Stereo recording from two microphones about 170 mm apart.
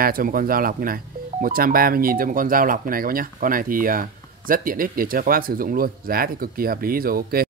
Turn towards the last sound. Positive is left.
turn(degrees=-60)  # may be behind; listen again after turning